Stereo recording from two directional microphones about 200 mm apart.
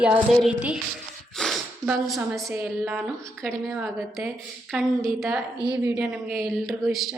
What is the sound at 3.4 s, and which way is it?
A woman's voice, centre (ahead or behind).